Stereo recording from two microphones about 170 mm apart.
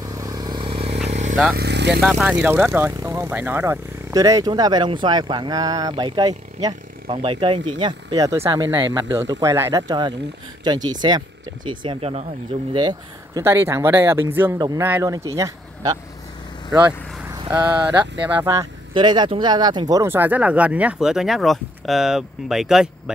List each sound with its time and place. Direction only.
0.0 s vehicle: 20° right (ahead or behind); by 1.3 s 40° right (ahead or behind)
1.3 s speech: centre (ahead or behind)
1.6 s speech: 85° right
2.0 s speech: 5° right (ahead or behind); by 12.3 s 35° right (ahead or behind)
12.7 s speech: 25° right (ahead or behind)
13.4 s speech: 15° right (ahead or behind)
18.4 s speech: 15° right (ahead or behind)
18.9 s speech: 25° right (ahead or behind); by 23.1 s centre (ahead or behind)